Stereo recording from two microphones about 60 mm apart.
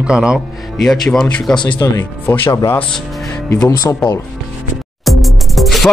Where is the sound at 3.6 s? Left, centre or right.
Left.